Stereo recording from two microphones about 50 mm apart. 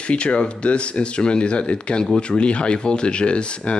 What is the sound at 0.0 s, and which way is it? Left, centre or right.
Speech, left.